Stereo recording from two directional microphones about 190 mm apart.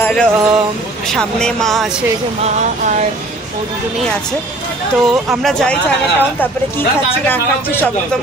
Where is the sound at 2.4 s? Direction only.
40° right (ahead or behind).